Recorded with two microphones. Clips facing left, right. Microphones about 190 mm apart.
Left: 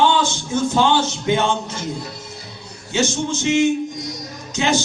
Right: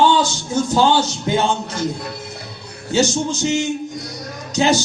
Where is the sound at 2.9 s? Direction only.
35° right (ahead or behind).